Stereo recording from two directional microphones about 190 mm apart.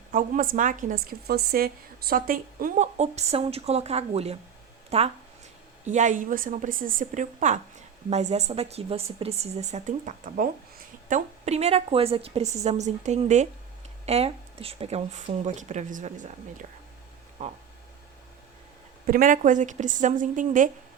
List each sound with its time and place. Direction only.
0.1 s a woman's voice: 45° right (ahead or behind)
19.0 s a woman's voice: 45° right (ahead or behind)